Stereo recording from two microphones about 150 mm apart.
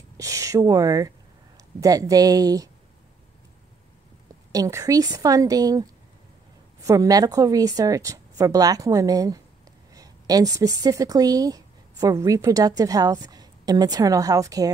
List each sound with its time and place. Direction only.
0.2 s a woman's voice: 20° right (ahead or behind)
4.5 s a woman's voice: 20° right (ahead or behind)